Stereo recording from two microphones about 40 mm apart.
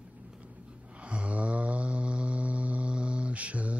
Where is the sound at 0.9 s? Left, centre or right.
Right.